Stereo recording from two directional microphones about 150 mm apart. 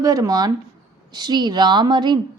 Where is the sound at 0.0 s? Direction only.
25° right (ahead or behind).